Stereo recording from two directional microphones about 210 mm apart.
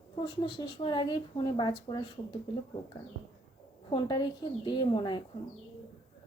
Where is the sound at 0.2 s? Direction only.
20° left (ahead or behind).